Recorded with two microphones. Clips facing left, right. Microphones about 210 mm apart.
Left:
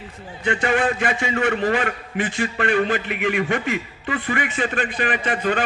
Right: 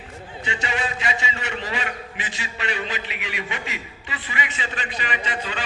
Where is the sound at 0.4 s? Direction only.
55° left (ahead or behind).